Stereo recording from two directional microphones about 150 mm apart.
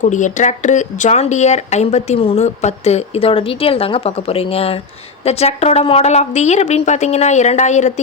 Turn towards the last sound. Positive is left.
turn(degrees=50)  # may be behind; listen again after turning